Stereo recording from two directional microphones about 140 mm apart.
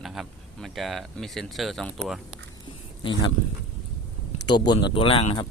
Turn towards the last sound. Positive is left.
turn(degrees=45)  # may be behind; listen again after turning